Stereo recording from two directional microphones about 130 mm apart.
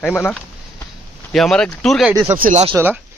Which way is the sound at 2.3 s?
90° right.